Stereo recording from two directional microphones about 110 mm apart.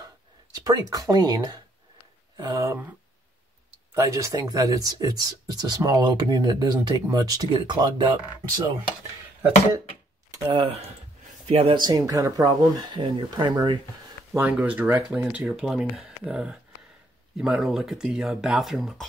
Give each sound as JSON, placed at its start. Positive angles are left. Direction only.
{"t": 0.7, "sound": "speech", "side_deg": -35}
{"t": 2.3, "sound": "speech", "side_deg": -25}
{"t": 3.9, "sound": "speech", "side_deg": -30}
{"t": 11.4, "sound": "speech", "side_deg": -65}
{"t": 11.7, "sound": "speech", "side_deg": -40}
{"t": 14.3, "sound": "speech", "side_deg": -15}